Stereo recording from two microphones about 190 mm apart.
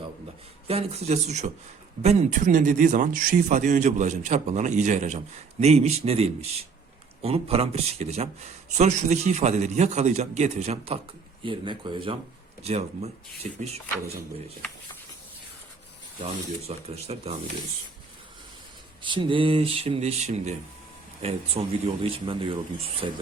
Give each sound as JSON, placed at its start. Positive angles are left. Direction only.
{"t": 0.7, "sound": "speech", "side_deg": -35}
{"t": 16.2, "sound": "speech", "side_deg": -35}
{"t": 19.0, "sound": "speech", "side_deg": -25}